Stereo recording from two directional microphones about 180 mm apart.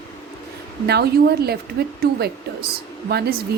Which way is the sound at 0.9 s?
65° right (ahead or behind).